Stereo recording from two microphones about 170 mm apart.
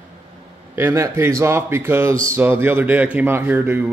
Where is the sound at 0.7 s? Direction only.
15° right (ahead or behind).